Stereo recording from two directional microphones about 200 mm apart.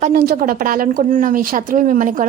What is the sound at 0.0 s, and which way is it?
A woman's voice, 50° right (ahead or behind).